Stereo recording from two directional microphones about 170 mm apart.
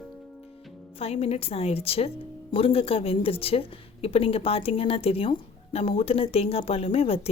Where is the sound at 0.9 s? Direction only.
35° left (ahead or behind).